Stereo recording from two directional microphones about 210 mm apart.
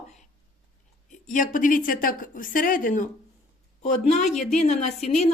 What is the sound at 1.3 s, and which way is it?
A woman's voice, 40° left (ahead or behind).